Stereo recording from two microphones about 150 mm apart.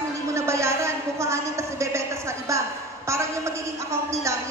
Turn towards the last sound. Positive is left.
turn(degrees=-20)  # may be behind; listen again after turning